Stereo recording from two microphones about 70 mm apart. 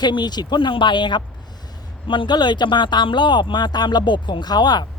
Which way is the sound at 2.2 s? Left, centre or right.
Left.